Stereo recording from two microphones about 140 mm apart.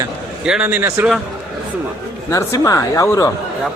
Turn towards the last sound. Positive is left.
turn(degrees=20)  # may be behind; listen again after turning